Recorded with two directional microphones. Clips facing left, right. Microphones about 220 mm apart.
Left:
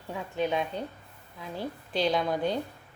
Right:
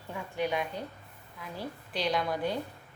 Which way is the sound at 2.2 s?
20° left (ahead or behind).